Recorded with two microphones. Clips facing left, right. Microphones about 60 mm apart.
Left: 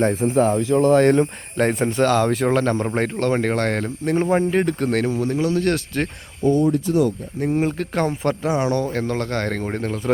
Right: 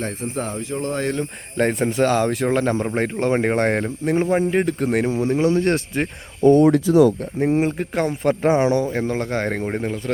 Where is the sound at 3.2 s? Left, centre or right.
Centre.